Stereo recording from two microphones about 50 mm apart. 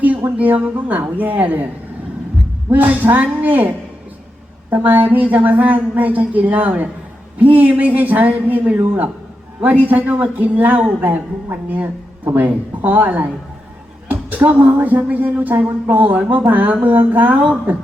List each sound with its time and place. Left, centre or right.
0.0 s speech: right
2.6 s speech: right
4.7 s speech: right